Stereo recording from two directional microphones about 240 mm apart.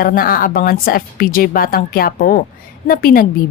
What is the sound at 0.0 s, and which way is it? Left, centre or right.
A woman's voice, left.